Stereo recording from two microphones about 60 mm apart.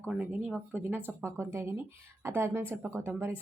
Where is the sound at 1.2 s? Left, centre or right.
Right.